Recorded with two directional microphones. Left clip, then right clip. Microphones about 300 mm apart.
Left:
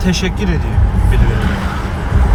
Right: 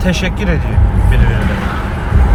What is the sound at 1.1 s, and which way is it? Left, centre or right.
Speech, left.